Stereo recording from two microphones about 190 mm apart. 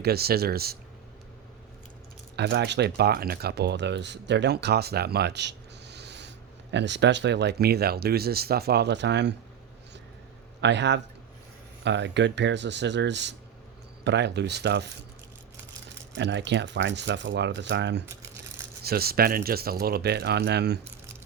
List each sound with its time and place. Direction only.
0.0 s speech: 55° right (ahead or behind)
2.3 s speech: 60° right (ahead or behind)
10.6 s speech: 65° right (ahead or behind)
16.1 s speech: 65° right (ahead or behind)
18.8 s speech: 55° right (ahead or behind)